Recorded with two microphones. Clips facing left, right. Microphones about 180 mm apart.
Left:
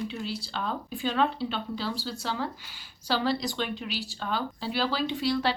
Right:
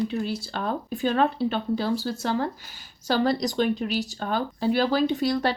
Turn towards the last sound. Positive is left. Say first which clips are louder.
# right 3 dB
turn(degrees=-45)  # may be behind; listen again after turning